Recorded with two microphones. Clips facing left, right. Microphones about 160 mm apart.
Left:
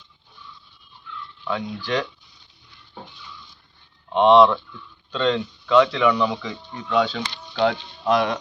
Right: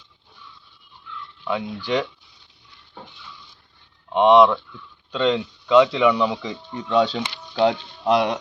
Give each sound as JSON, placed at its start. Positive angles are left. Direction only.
{"t": 1.5, "sound": "speech", "side_deg": -15}
{"t": 4.1, "sound": "speech", "side_deg": -15}
{"t": 6.4, "sound": "speech", "side_deg": -25}